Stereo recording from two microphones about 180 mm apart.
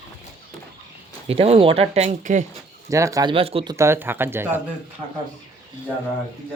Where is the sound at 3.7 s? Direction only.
15° right (ahead or behind).